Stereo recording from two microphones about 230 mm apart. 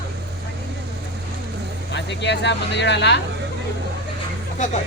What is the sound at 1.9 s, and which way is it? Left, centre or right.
Speech, left.